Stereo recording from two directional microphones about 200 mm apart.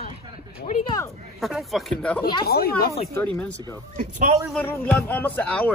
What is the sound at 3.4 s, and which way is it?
Speech, 5° left (ahead or behind).